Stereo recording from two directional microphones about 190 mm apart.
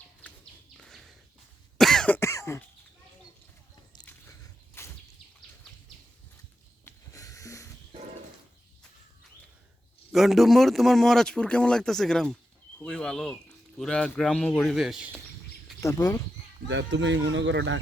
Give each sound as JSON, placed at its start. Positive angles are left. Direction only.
{"t": 0.8, "sound": "bird", "side_deg": 0}
{"t": 1.8, "sound": "cough", "side_deg": 0}
{"t": 4.0, "sound": "biting", "side_deg": 15}
{"t": 6.8, "sound": "a sound", "side_deg": 15}
{"t": 10.1, "sound": "speech", "side_deg": 0}
{"t": 15.8, "sound": "speech", "side_deg": 20}
{"t": 16.6, "sound": "speech", "side_deg": -75}